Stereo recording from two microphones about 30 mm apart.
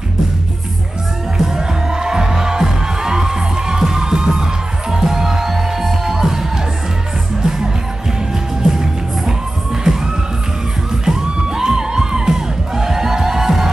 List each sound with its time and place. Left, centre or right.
1.4 s music: centre
11.1 s music: centre